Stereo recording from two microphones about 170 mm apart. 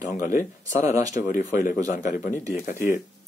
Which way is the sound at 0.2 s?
45° left (ahead or behind).